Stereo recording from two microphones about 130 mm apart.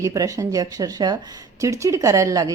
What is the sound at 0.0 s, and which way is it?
A woman's voice, 25° right (ahead or behind).